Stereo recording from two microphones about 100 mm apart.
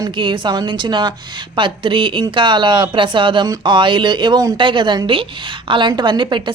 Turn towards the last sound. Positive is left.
turn(degrees=-50)  # may be behind; listen again after turning